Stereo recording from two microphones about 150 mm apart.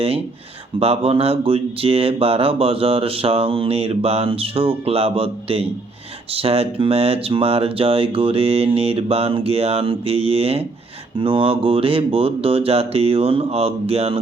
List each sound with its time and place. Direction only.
0.8 s speech: 40° right (ahead or behind)